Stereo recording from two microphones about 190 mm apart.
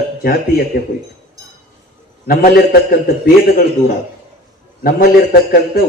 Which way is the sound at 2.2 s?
50° left (ahead or behind).